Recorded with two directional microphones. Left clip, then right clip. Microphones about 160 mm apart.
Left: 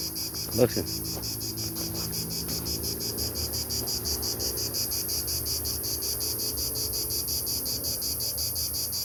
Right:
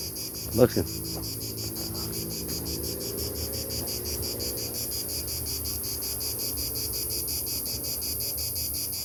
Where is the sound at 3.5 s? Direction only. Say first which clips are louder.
Left 2 dB; 25° right (ahead or behind).